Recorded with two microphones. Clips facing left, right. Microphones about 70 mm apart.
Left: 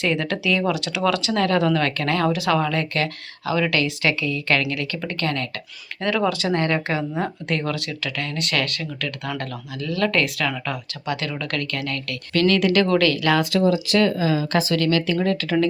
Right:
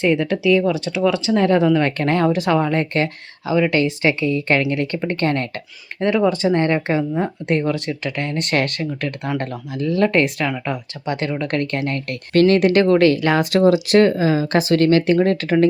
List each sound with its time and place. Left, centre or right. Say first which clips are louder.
0.1 s speech: right 6 dB; centre
0.7 s speech: right 3 dB; left
1.0 s speech: right 4 dB; centre
2.0 s speech: right 4 dB; right
7.5 s speech: right 6 dB; centre
7.9 s speech: right 5 dB; right
12.8 s speech: right 5 dB; right
13.4 s speech: right 5 dB; right
14.0 s speech: right 4 dB; right